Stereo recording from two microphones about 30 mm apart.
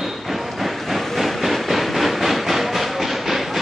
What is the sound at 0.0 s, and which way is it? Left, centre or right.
Train, centre.